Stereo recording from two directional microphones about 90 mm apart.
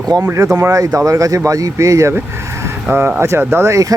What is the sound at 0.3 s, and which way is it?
Speech, 35° right (ahead or behind).